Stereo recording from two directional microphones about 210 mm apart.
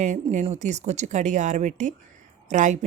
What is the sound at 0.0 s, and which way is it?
Speech, 35° right (ahead or behind).